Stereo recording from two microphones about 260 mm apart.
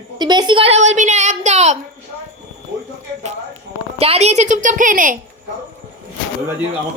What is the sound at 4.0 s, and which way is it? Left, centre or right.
A woman's voice, right.